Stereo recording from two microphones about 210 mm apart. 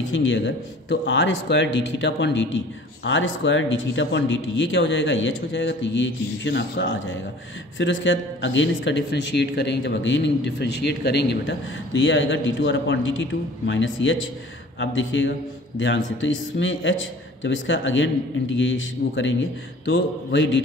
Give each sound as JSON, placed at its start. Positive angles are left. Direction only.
{"t": 0.1, "sound": "speech", "side_deg": 65}